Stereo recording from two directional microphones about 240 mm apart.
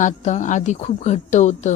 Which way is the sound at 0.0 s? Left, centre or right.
Left.